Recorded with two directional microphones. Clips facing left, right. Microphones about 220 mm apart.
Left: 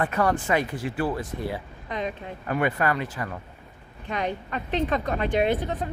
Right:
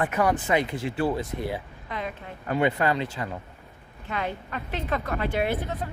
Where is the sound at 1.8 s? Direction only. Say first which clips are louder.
Left 4 dB; 20° left (ahead or behind).